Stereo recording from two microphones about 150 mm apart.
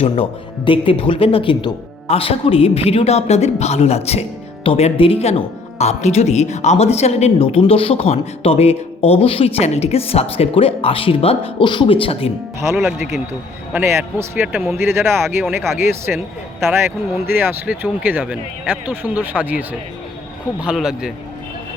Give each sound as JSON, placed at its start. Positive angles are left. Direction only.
{"t": 0.0, "sound": "speech", "side_deg": 35}
{"t": 12.6, "sound": "speech", "side_deg": -15}
{"t": 17.3, "sound": "speech", "side_deg": -15}